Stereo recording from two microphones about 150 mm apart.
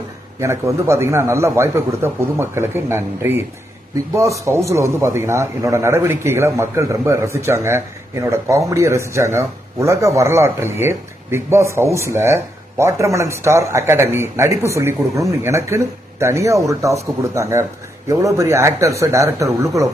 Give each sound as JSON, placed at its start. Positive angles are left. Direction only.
{"t": 0.3, "sound": "a man's voice", "side_deg": -20}